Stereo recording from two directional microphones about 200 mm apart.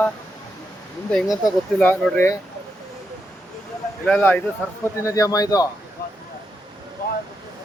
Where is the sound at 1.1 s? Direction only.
Centre (ahead or behind).